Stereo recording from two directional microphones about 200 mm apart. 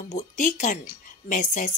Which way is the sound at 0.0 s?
40° left (ahead or behind).